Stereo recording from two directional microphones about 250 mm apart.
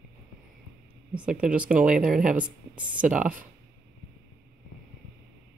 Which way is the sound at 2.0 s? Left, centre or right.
Right.